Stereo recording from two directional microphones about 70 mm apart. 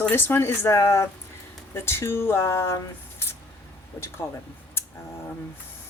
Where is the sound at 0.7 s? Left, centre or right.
Left.